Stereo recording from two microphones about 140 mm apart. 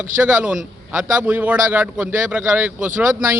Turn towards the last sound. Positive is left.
turn(degrees=-10)  # may be behind; listen again after turning